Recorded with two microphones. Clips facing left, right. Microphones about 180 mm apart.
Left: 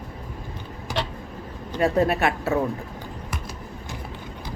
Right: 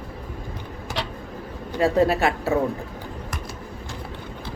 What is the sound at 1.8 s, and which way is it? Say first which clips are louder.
Speech: right 1 dB; 25° right (ahead or behind).